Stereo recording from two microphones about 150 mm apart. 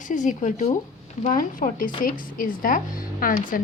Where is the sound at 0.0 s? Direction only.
60° left (ahead or behind).